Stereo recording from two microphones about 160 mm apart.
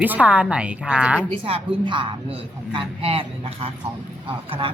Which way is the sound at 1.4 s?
30° right (ahead or behind).